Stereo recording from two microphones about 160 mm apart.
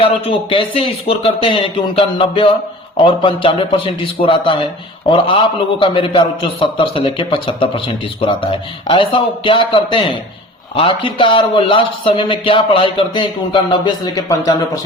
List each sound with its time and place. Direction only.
0.0 s speech: 35° left (ahead or behind)